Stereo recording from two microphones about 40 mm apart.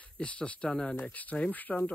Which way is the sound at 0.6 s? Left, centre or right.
Centre.